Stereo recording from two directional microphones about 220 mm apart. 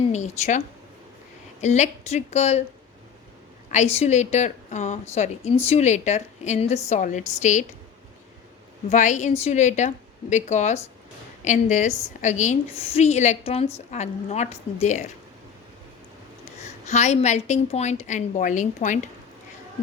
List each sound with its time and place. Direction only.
0.1 s a woman's voice: 30° left (ahead or behind)
1.6 s a woman's voice: 30° left (ahead or behind)
3.9 s a woman's voice: 30° left (ahead or behind)
8.9 s a woman's voice: 35° left (ahead or behind)
16.6 s a woman's voice: 30° left (ahead or behind)